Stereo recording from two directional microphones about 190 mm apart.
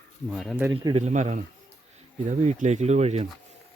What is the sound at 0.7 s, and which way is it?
Speech, 25° right (ahead or behind).